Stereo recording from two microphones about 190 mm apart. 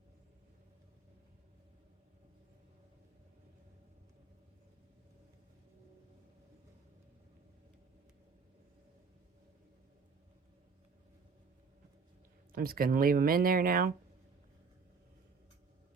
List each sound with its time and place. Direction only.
12.5 s speech: 50° right (ahead or behind)